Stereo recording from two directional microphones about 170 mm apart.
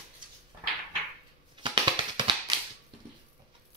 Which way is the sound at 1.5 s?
30° right (ahead or behind).